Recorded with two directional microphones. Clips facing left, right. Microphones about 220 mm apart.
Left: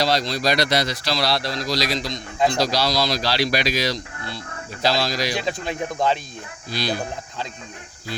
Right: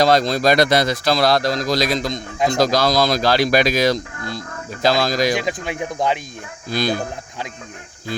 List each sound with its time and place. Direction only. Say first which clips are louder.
0.0 s speech: right 6 dB; 50° right (ahead or behind)
5.4 s speech: right 2 dB; 15° right (ahead or behind)
6.7 s speech: right 5 dB; 50° right (ahead or behind)